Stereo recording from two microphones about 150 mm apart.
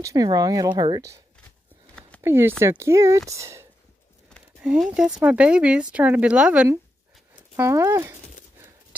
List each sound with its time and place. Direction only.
0.0 s speech: 25° right (ahead or behind)
2.0 s a sound: 10° left (ahead or behind)
2.2 s speech: 15° right (ahead or behind)
4.6 s speech: 5° right (ahead or behind)
7.5 s speech: 20° right (ahead or behind)